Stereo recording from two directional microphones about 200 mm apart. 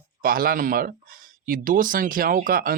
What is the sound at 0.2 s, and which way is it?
Speech, 45° right (ahead or behind).